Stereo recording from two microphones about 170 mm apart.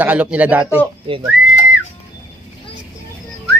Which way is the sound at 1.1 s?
30° right (ahead or behind).